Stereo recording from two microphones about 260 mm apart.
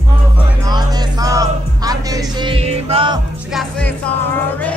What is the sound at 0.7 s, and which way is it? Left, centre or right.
Music, centre.